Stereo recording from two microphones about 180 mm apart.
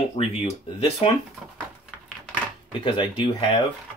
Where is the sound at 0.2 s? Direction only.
30° left (ahead or behind).